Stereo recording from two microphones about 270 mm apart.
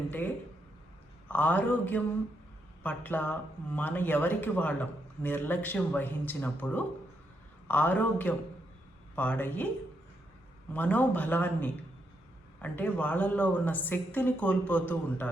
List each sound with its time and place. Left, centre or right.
1.3 s a man's voice: centre
10.8 s speech: centre